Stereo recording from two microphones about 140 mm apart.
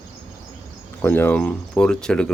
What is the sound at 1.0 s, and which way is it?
Speech, 15° left (ahead or behind).